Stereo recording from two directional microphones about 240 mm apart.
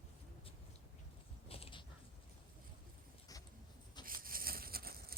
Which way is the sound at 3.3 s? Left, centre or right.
Centre.